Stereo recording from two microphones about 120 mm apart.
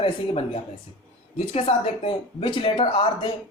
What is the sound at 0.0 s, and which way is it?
A woman's voice, 55° left (ahead or behind).